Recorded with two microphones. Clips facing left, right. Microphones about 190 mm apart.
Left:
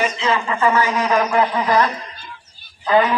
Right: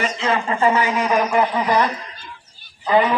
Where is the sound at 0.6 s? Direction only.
25° right (ahead or behind).